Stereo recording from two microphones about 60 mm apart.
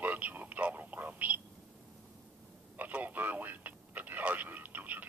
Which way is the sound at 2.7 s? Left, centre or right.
Right.